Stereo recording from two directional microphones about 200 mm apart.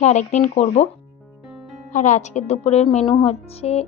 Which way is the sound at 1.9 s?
35° left (ahead or behind).